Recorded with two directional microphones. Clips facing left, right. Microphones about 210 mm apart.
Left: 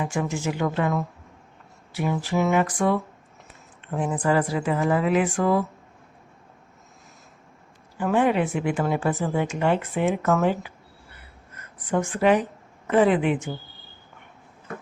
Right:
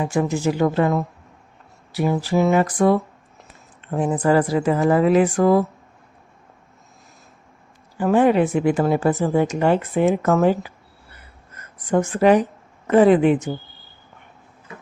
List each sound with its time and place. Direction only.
0.0 s speech: 35° right (ahead or behind)
7.9 s speech: 40° right (ahead or behind)
11.9 s speech: 40° right (ahead or behind)